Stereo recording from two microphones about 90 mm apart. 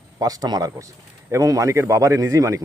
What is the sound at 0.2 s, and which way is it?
A man's voice, 40° right (ahead or behind).